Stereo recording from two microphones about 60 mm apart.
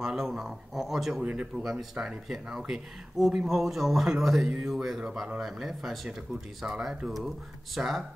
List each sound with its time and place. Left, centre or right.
0.0 s speech: centre
1.2 s speech: right
1.6 s speech: centre